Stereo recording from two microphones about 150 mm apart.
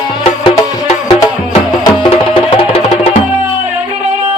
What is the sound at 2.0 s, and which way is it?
Music, 35° left (ahead or behind).